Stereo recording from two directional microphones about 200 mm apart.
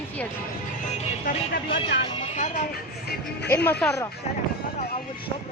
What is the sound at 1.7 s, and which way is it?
Speech, 25° left (ahead or behind).